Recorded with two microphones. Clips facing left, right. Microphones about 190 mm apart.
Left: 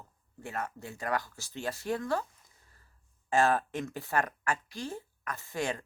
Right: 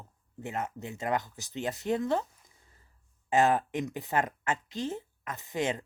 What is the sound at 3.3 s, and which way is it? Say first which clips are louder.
Speech: right 2 dB; 20° right (ahead or behind).